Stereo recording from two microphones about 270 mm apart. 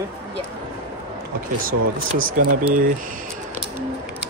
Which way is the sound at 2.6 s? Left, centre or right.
Right.